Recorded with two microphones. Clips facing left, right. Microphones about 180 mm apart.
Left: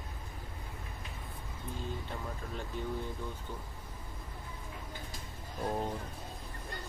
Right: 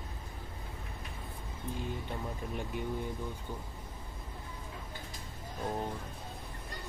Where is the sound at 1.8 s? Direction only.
15° right (ahead or behind).